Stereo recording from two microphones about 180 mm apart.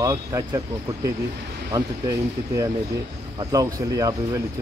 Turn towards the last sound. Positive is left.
turn(degrees=-20)  # may be behind; listen again after turning